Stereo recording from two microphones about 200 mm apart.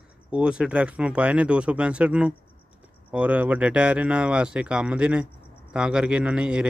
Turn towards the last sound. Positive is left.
turn(degrees=-5)  # may be behind; listen again after turning